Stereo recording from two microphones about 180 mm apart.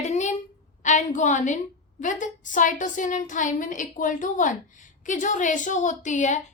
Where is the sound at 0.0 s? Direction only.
40° left (ahead or behind).